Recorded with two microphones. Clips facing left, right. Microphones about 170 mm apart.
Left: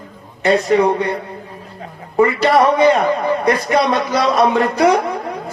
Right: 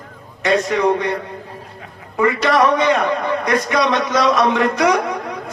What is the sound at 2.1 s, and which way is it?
Speech, 30° left (ahead or behind).